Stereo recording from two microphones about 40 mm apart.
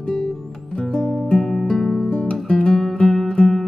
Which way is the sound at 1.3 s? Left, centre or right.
Centre.